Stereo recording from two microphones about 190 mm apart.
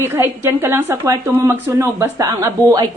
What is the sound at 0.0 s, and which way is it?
A woman's voice, 15° right (ahead or behind).